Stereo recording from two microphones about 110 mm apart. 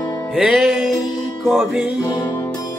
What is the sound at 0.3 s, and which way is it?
Music, centre (ahead or behind).